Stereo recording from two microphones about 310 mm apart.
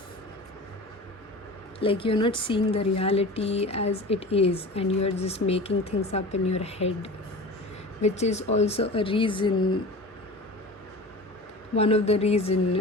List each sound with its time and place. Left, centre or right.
1.8 s speech: centre
11.8 s speech: centre